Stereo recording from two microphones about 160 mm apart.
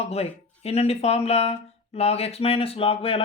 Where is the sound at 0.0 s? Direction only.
40° left (ahead or behind).